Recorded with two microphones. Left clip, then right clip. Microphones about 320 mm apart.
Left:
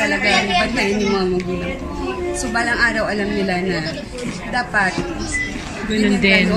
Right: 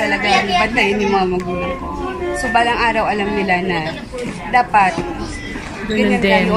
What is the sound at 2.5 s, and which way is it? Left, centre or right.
A woman's voice, centre.